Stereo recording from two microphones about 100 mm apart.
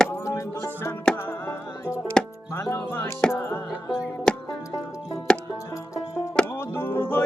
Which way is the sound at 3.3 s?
20° left (ahead or behind).